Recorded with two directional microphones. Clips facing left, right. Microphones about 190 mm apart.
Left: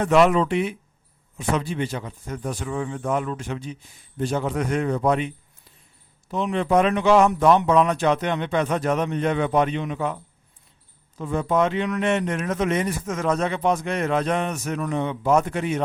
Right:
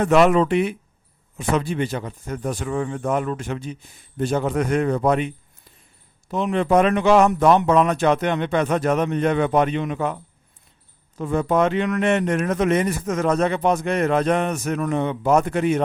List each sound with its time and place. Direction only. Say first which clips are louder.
0.0 s a man's voice: right 2 dB; 50° right (ahead or behind)
6.3 s a man's voice: right 2 dB; 55° right (ahead or behind)
11.2 s speech: right 2 dB; 55° right (ahead or behind)